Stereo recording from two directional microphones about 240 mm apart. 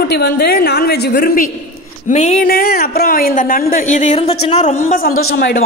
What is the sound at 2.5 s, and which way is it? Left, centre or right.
A woman's voice, left.